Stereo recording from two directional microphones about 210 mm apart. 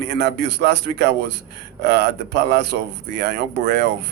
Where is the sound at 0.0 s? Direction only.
55° right (ahead or behind).